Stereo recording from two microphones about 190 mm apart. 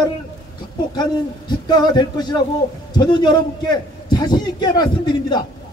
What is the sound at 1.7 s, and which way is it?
A man's voice, 20° left (ahead or behind).